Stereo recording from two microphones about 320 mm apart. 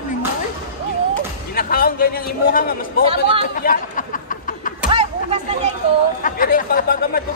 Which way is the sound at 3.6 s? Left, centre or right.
Left.